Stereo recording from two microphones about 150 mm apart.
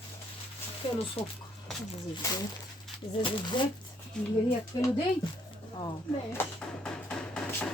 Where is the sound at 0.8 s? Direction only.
35° left (ahead or behind).